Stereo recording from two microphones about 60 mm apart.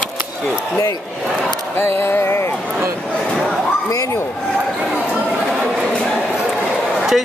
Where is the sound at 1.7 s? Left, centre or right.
Left.